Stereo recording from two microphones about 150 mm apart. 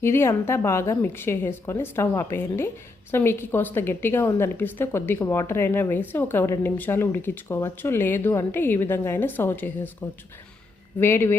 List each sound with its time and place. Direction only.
0.0 s a woman's voice: 15° left (ahead or behind)
11.0 s a woman's voice: 15° left (ahead or behind)